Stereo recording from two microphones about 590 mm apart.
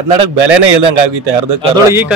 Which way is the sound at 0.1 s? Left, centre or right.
Right.